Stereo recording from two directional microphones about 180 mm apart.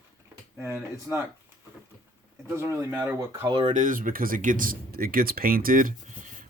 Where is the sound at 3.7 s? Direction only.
45° right (ahead or behind).